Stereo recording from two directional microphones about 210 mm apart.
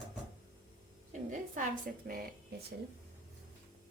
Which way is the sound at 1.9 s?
45° right (ahead or behind).